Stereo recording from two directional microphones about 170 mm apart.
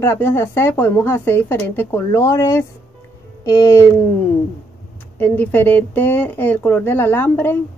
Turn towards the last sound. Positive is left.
turn(degrees=10)  # may be behind; listen again after turning